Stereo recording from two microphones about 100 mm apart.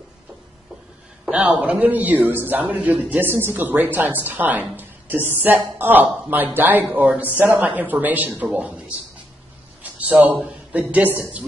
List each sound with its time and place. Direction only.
1.3 s a man's voice: 10° right (ahead or behind)
9.9 s a man's voice: 15° right (ahead or behind)